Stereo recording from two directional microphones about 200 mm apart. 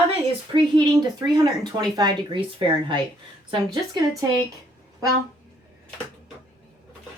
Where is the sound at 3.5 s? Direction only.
20° right (ahead or behind).